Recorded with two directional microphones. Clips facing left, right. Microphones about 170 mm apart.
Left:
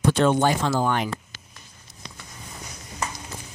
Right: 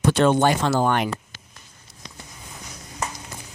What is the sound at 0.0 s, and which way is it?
Speech, 70° right (ahead or behind).